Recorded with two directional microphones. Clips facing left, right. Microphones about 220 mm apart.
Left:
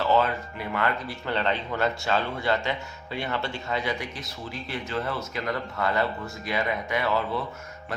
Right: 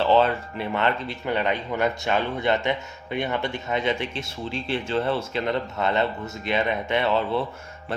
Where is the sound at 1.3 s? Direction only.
15° right (ahead or behind).